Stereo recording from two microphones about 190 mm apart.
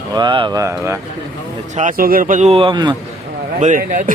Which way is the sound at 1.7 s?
45° right (ahead or behind).